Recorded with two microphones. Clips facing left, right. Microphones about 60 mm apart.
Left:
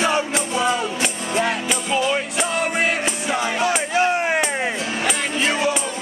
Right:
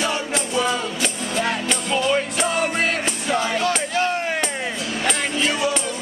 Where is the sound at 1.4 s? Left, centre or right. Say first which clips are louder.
Even; centre; by 5.7 s left.